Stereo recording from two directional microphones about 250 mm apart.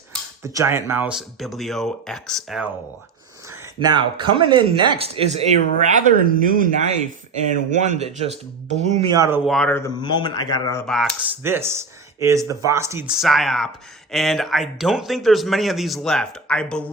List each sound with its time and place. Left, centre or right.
0.4 s speech: centre
3.6 s speech: centre
9.5 s speech: centre
11.4 s speech: centre